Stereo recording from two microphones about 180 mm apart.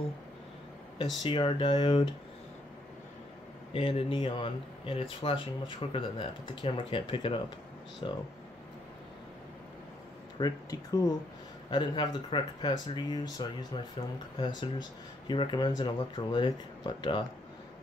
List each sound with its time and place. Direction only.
1.2 s speech: 25° left (ahead or behind)
3.7 s speech: 30° left (ahead or behind)
10.4 s speech: 20° left (ahead or behind)